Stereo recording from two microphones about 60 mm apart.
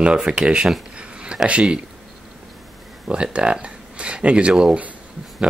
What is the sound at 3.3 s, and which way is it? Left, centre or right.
Speech, centre.